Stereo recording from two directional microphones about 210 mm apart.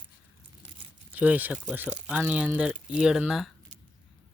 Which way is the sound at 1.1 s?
5° right (ahead or behind).